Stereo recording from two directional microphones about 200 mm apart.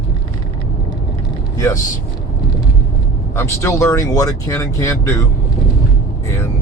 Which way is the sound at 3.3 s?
15° left (ahead or behind).